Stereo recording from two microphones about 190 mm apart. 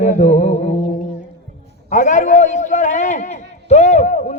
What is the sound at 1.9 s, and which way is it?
A man's voice, 40° left (ahead or behind).